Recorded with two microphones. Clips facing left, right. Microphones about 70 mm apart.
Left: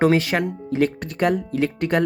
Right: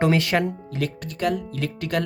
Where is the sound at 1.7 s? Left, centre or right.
Left.